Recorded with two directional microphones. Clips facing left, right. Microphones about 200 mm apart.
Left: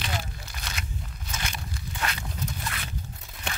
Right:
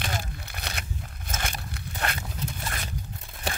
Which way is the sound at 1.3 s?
55° right (ahead or behind).